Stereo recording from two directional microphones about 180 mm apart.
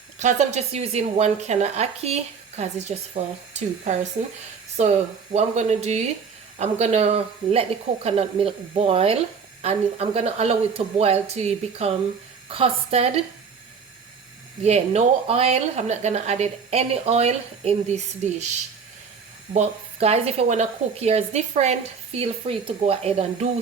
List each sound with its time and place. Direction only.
0.2 s speech: 40° right (ahead or behind)
4.8 s speech: 35° right (ahead or behind)
14.6 s speech: 35° right (ahead or behind)
19.5 s speech: 35° right (ahead or behind)